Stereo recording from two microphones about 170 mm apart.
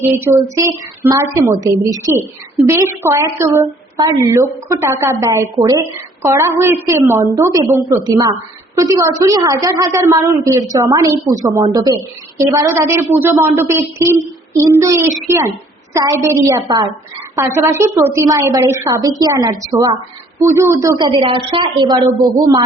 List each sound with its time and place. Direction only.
0.0 s a woman's voice: 15° right (ahead or behind)